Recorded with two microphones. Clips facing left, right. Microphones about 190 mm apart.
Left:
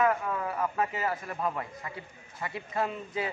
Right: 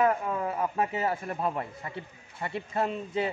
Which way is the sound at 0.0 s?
25° right (ahead or behind).